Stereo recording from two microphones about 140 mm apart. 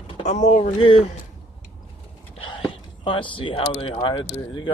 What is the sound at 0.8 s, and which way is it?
Speech, 45° left (ahead or behind).